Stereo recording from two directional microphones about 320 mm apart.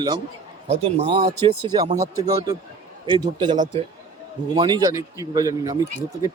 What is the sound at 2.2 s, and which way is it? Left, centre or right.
A man's voice, centre.